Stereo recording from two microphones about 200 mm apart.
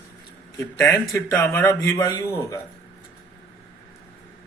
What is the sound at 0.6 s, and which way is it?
A man's voice, 15° left (ahead or behind).